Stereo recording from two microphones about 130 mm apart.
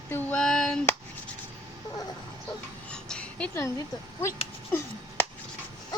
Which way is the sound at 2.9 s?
10° left (ahead or behind).